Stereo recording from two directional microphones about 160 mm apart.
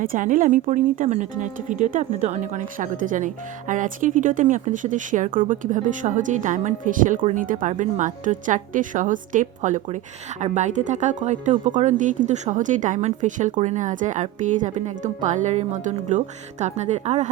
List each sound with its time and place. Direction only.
0.0 s speech: 55° right (ahead or behind)